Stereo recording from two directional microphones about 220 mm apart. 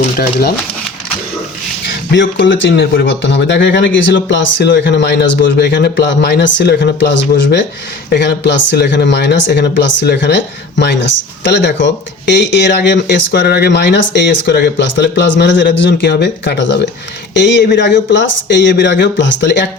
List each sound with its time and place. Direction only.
0.2 s speech: 45° left (ahead or behind)
2.1 s speech: 55° left (ahead or behind)